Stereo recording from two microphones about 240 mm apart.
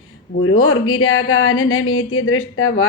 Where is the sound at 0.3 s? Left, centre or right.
Left.